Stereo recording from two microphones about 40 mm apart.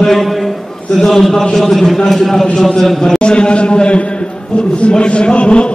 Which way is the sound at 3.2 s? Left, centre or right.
Left.